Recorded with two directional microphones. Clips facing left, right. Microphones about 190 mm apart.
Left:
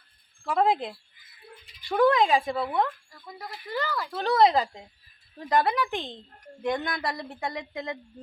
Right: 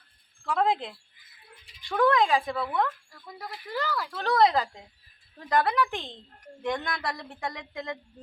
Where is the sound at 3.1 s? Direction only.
10° left (ahead or behind).